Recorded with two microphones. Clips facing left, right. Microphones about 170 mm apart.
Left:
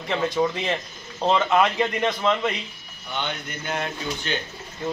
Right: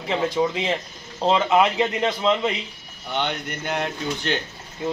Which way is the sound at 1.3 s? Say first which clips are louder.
Right 1 dB; 15° right (ahead or behind).